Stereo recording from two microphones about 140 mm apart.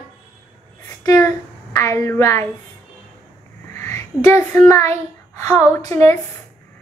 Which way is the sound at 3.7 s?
15° left (ahead or behind).